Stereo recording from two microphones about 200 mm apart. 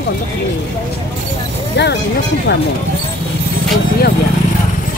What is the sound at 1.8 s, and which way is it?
Speech, 60° left (ahead or behind).